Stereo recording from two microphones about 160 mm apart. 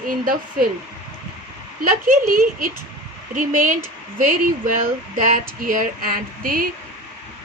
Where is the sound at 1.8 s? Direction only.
60° right (ahead or behind).